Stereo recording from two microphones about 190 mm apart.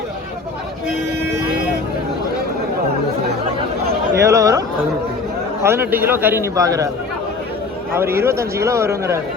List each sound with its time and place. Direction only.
4.2 s a man's voice: 15° right (ahead or behind)
7.9 s a man's voice: 10° right (ahead or behind)